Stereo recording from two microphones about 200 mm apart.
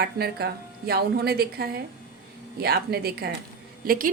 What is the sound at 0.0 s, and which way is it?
A woman's voice, 55° right (ahead or behind).